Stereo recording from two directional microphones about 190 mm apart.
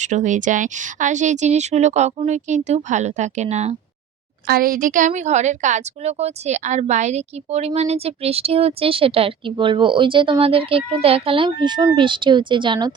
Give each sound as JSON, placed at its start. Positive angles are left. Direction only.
{"t": 0.0, "sound": "a woman's voice", "side_deg": -40}
{"t": 4.4, "sound": "a woman's voice", "side_deg": -50}